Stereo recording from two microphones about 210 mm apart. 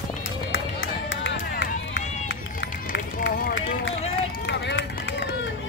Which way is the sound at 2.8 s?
50° left (ahead or behind).